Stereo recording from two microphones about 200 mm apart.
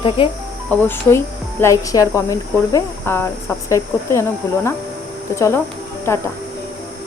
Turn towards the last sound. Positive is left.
turn(degrees=15)  # may be behind; listen again after turning